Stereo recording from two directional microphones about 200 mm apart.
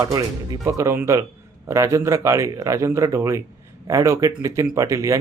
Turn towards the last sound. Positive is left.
turn(degrees=-15)  # may be behind; listen again after turning